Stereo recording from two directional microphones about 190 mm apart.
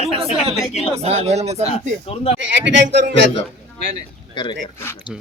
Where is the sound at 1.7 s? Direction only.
30° left (ahead or behind).